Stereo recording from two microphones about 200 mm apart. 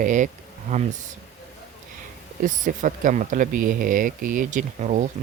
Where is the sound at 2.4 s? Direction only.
40° right (ahead or behind).